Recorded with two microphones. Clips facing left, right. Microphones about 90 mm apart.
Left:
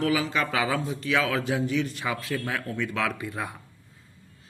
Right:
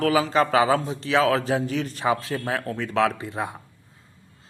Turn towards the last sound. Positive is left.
turn(degrees=-25)  # may be behind; listen again after turning